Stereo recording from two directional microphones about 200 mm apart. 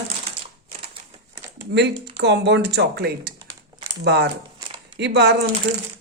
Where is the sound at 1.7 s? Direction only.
60° right (ahead or behind).